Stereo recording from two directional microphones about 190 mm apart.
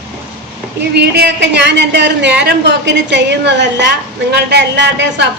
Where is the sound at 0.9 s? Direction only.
60° right (ahead or behind).